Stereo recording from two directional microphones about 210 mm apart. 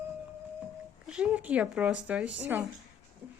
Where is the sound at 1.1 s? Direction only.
5° right (ahead or behind).